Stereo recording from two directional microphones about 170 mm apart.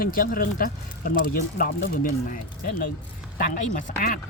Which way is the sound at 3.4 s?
50° left (ahead or behind).